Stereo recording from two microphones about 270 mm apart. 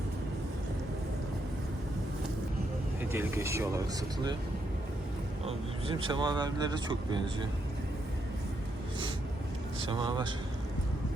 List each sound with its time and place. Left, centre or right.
3.0 s speech: centre
5.5 s speech: centre
9.8 s speech: centre